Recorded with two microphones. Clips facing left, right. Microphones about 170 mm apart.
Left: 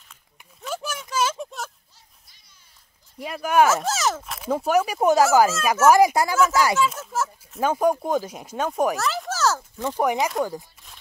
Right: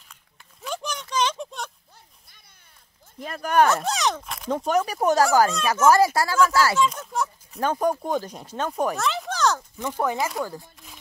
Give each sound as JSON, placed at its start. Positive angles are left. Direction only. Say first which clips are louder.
{"t": 0.6, "sound": "a sound", "louder": "left 1 dB", "side_deg": 5}
{"t": 3.2, "sound": "speech", "louder": "left 1 dB", "side_deg": 10}
{"t": 6.9, "sound": "speech", "louder": "even", "side_deg": 5}
{"t": 9.8, "sound": "speech", "louder": "left 3 dB", "side_deg": 15}